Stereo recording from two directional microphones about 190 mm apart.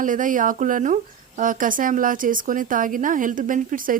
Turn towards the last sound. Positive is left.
turn(degrees=-45)  # may be behind; listen again after turning